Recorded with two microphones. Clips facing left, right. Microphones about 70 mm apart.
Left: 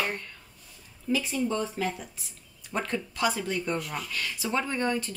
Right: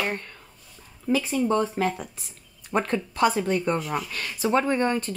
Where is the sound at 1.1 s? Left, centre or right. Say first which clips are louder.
Right 5 dB; right.